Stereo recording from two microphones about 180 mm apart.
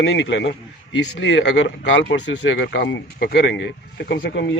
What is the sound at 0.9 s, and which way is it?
Speech, 90° left.